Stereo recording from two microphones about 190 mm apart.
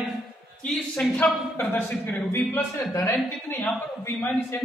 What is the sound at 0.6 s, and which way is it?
A woman's voice, 5° left (ahead or behind).